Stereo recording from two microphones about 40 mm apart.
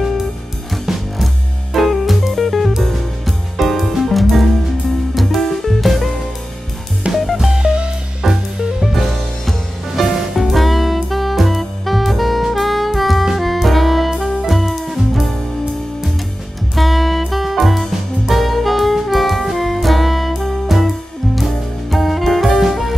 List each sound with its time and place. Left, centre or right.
0.8 s music: centre
7.5 s music: right
8.2 s music: centre
10.1 s music: centre
16.7 s music: centre
18.3 s saxophone: centre
21.9 s music: centre